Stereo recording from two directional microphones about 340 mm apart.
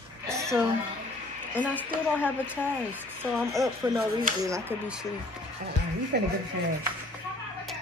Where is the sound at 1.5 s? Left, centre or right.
Centre.